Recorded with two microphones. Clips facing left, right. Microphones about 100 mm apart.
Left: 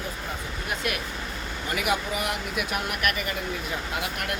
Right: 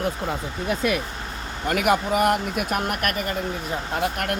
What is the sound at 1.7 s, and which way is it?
Speech, 50° right (ahead or behind).